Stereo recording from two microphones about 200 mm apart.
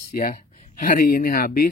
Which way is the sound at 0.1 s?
45° left (ahead or behind).